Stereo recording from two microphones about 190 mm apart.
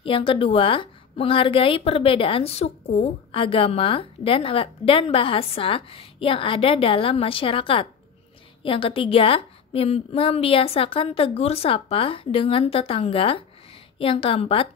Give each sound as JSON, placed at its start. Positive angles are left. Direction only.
{"t": 0.0, "sound": "a woman's voice", "side_deg": 25}